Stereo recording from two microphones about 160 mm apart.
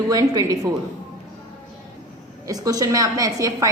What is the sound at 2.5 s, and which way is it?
A woman's voice, 25° right (ahead or behind).